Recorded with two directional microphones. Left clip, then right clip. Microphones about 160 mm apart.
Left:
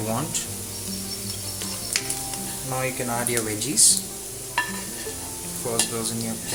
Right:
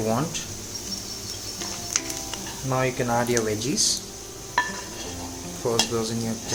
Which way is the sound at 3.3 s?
30° right (ahead or behind).